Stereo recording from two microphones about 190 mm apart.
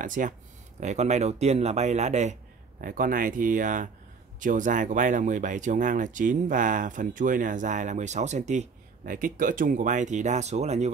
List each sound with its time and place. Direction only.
0.0 s speech: 45° right (ahead or behind)
2.8 s speech: 45° right (ahead or behind)